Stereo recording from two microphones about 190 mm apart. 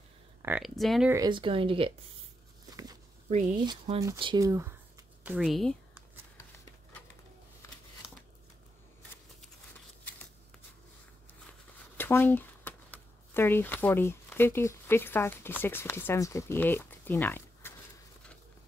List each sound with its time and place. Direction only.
0.4 s speech: 10° right (ahead or behind)
1.1 s speech: 20° right (ahead or behind)
2.7 s a sound: 20° right (ahead or behind)
3.6 s speech: 30° right (ahead or behind)
5.2 s speech: 5° right (ahead or behind)
12.0 s speech: 10° left (ahead or behind)